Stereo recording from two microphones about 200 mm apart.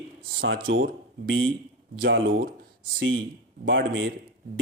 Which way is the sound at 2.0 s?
55° right (ahead or behind).